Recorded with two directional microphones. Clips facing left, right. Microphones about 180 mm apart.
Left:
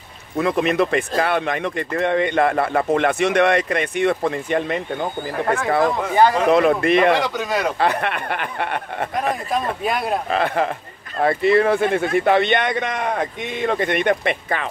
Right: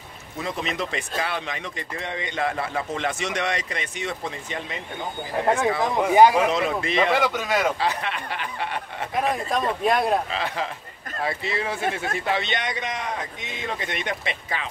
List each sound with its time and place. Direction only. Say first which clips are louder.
0.4 s speech: left 10 dB; 60° left (ahead or behind)
5.9 s speech: right 1 dB; 15° right (ahead or behind)
6.5 s speech: left 9 dB; 60° left (ahead or behind)
7.2 s a man's voice: left 1 dB; centre (ahead or behind)
7.8 s speech: left 6 dB; 60° left (ahead or behind)
9.5 s a man's voice: even; centre (ahead or behind)
10.3 s speech: left 8 dB; 55° left (ahead or behind)